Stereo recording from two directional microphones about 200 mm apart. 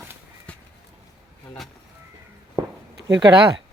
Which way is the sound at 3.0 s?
60° right (ahead or behind).